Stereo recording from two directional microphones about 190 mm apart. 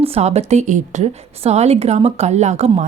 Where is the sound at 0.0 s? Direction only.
35° right (ahead or behind).